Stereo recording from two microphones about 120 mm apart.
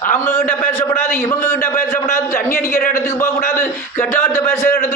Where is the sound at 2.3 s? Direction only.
90° left.